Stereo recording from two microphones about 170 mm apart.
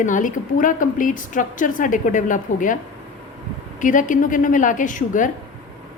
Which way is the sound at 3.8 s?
50° left (ahead or behind).